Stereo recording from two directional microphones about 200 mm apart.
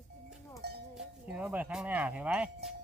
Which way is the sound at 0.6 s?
55° right (ahead or behind).